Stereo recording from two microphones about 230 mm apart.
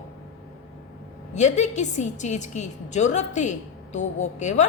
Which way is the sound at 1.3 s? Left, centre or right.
Left.